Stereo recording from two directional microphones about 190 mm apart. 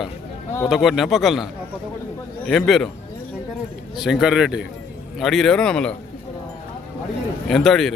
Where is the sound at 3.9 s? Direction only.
Centre (ahead or behind).